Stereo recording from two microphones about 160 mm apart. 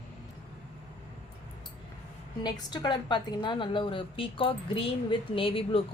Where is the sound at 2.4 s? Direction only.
25° left (ahead or behind).